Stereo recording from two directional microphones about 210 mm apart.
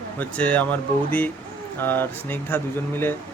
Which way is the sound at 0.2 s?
5° left (ahead or behind).